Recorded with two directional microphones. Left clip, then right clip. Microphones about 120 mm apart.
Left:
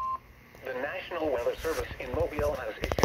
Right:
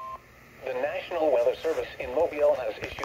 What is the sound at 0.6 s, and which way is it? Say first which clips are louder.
Speech: right 4 dB; 20° right (ahead or behind).